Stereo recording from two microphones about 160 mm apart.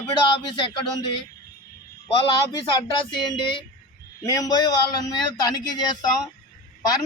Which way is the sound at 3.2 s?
30° left (ahead or behind).